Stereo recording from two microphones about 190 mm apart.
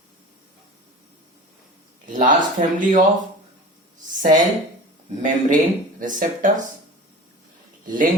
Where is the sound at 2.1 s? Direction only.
45° right (ahead or behind).